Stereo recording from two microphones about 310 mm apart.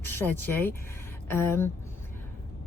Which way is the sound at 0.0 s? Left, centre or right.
Centre.